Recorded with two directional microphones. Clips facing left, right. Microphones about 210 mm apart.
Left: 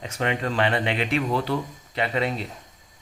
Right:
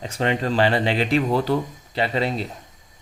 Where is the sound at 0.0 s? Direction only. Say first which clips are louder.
Right 3 dB; 30° right (ahead or behind).